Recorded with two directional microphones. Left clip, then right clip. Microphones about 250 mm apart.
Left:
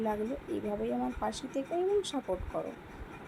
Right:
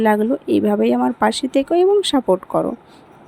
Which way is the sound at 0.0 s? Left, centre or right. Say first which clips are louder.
Right 17 dB; right.